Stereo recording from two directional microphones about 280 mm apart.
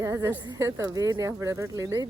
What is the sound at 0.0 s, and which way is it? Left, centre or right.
Speech, centre.